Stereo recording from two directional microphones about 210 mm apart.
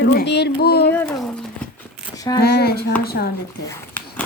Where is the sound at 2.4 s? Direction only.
50° left (ahead or behind).